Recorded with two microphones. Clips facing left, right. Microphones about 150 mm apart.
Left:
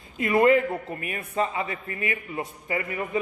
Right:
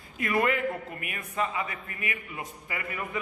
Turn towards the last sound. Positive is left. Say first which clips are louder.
# left 7 dB
turn(degrees=30)  # may be behind; listen again after turning